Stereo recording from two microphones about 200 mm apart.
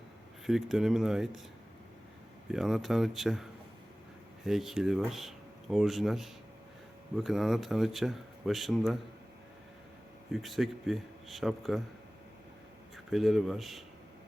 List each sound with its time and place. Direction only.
0.4 s speech: centre (ahead or behind)
2.5 s speech: centre (ahead or behind)
4.4 s speech: centre (ahead or behind)
10.4 s speech: centre (ahead or behind)
13.1 s speech: centre (ahead or behind)